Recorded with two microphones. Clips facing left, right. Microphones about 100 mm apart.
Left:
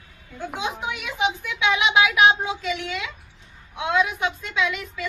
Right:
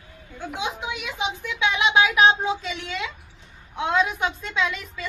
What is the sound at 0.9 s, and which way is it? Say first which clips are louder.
A woman's voice: left 4 dB; 25° right (ahead or behind).